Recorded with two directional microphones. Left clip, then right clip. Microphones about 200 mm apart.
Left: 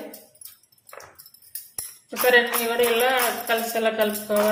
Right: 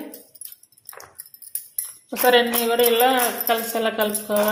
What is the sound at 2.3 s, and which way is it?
Speech, 30° right (ahead or behind).